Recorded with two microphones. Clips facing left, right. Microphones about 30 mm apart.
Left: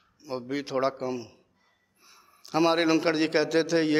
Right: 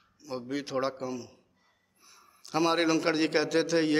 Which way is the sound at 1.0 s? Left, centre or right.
Left.